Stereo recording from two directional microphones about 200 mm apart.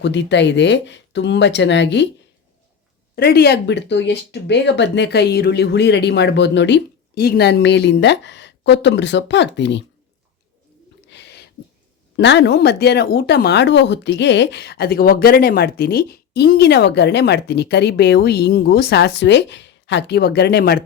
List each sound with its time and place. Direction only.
0.0 s speech: 60° left (ahead or behind)
3.2 s speech: 55° left (ahead or behind)
11.1 s a sound: 60° left (ahead or behind)
12.1 s speech: 60° left (ahead or behind)